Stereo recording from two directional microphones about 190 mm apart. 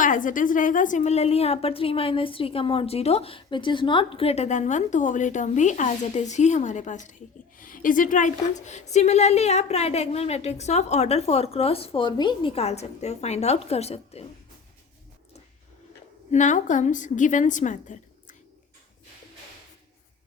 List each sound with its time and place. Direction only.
0.0 s a woman's voice: 45° left (ahead or behind)
16.3 s a woman's voice: 40° left (ahead or behind)